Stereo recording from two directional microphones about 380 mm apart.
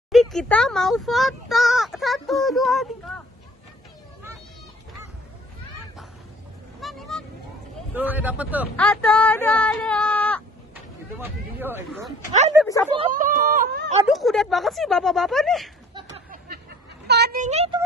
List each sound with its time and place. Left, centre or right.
0.1 s a child's voice: centre
6.8 s vehicle: centre
7.9 s a child's voice: centre
12.6 s speech: centre
12.9 s speech: centre
14.0 s a child's voice: centre
15.9 s a sound: centre
17.1 s speech: right